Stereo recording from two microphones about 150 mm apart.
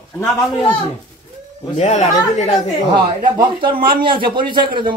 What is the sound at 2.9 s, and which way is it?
Speech, 30° right (ahead or behind).